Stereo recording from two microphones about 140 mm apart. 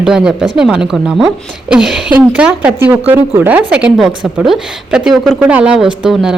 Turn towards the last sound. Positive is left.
turn(degrees=-5)  # may be behind; listen again after turning